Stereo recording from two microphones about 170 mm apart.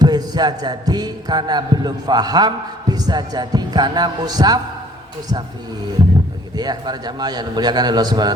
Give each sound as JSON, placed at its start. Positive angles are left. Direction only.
{"t": 0.0, "sound": "a man's voice", "side_deg": -25}
{"t": 6.6, "sound": "a man's voice", "side_deg": -25}